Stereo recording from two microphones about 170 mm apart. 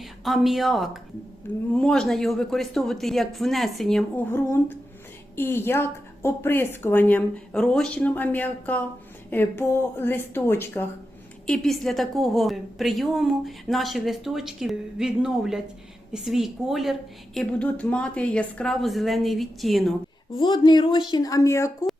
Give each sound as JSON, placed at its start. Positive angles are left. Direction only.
{"t": 0.0, "sound": "a woman's voice", "side_deg": 0}
{"t": 4.3, "sound": "a woman's voice", "side_deg": 15}
{"t": 11.4, "sound": "a woman's voice", "side_deg": 0}
{"t": 20.3, "sound": "speech", "side_deg": 25}